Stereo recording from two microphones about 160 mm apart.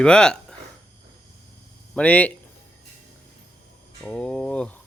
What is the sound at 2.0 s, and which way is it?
Speech, 10° left (ahead or behind).